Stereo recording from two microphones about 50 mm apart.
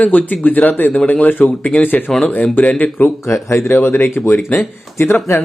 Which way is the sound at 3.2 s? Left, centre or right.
Left.